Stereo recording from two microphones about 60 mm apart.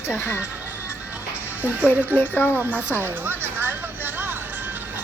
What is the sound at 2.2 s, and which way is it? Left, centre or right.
Speech, left.